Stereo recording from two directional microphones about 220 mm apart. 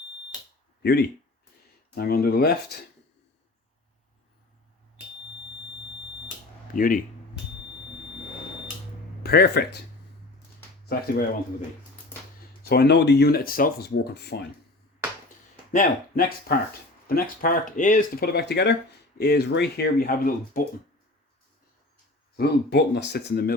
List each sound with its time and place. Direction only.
0.8 s speech: 50° left (ahead or behind)
6.7 s speech: 40° left (ahead or behind)
9.2 s speech: 45° left (ahead or behind)
12.6 s speech: 45° left (ahead or behind)
15.7 s speech: 40° left (ahead or behind)
22.4 s speech: 50° left (ahead or behind)